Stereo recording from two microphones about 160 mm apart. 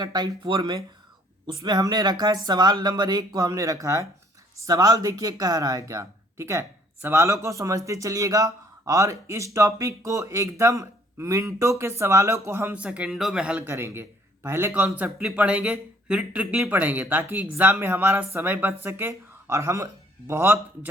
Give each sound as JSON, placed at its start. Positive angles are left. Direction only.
{"t": 0.0, "sound": "speech", "side_deg": -25}